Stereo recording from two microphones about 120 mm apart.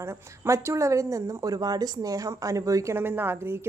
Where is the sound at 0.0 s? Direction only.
25° right (ahead or behind).